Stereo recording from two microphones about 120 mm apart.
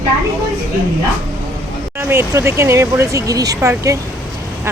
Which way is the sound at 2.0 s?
20° right (ahead or behind).